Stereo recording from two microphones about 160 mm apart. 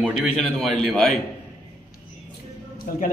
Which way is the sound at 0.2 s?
Centre (ahead or behind).